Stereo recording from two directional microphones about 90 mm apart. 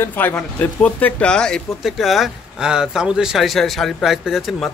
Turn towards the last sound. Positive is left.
turn(degrees=0)  # may be behind; listen again after turning